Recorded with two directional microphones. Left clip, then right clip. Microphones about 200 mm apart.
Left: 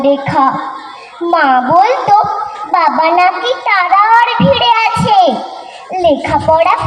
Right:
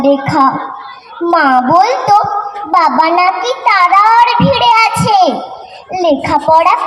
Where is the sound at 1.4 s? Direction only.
40° right (ahead or behind).